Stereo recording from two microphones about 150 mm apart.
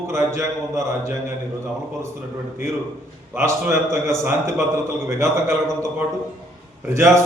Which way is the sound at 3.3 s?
15° right (ahead or behind).